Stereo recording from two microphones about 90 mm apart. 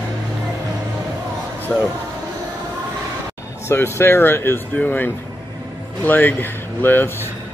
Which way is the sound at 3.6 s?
25° left (ahead or behind).